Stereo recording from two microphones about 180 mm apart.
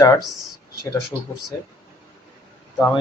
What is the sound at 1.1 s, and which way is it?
Speech, 15° right (ahead or behind).